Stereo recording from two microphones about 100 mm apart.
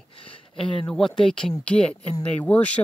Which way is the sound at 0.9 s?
5° left (ahead or behind).